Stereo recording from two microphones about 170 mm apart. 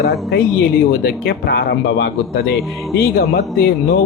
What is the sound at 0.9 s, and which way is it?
Speech, 65° left (ahead or behind).